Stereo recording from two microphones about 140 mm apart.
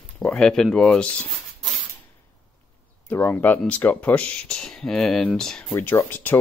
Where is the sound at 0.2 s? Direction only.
5° left (ahead or behind).